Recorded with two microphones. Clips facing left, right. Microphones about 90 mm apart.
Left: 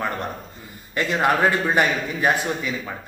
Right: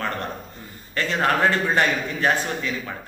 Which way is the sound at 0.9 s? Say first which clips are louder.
Left 2 dB; 15° left (ahead or behind).